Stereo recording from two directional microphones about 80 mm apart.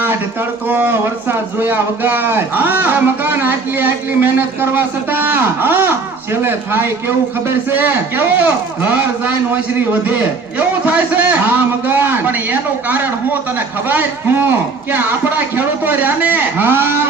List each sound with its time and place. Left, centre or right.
0.7 s a man's voice: right